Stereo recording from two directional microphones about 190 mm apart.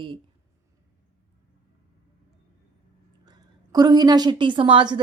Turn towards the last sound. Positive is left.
turn(degrees=-25)  # may be behind; listen again after turning